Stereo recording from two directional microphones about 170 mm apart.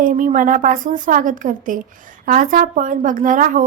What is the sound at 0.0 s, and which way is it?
Speech, 50° right (ahead or behind).